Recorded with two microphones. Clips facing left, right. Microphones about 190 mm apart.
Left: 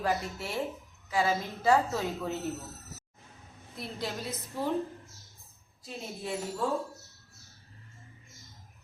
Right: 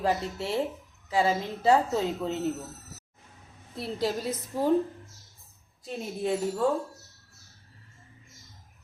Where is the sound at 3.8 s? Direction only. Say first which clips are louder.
Right 7 dB; 35° right (ahead or behind).